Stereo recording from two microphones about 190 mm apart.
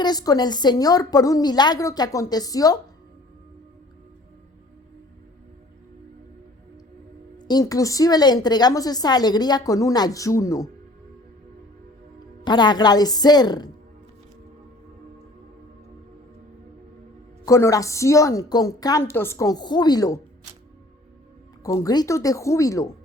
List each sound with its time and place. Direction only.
0.0 s a woman's voice: 20° left (ahead or behind)
7.3 s a woman's voice: 20° left (ahead or behind)
12.5 s a woman's voice: 20° left (ahead or behind)
17.4 s a woman's voice: 15° left (ahead or behind)
21.6 s a woman's voice: 15° left (ahead or behind)